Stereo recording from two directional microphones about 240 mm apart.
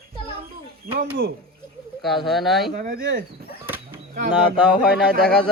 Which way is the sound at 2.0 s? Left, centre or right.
Centre.